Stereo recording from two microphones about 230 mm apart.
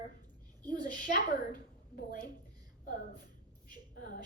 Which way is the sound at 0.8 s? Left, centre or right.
Left.